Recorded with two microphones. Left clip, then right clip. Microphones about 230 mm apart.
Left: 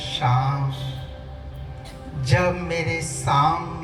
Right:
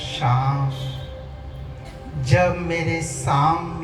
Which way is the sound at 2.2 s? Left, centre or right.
Left.